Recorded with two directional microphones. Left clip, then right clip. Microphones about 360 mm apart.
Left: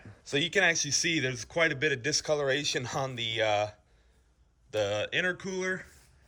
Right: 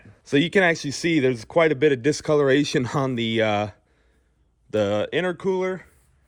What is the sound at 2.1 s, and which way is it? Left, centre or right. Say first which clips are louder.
Speech: right 6 dB; right.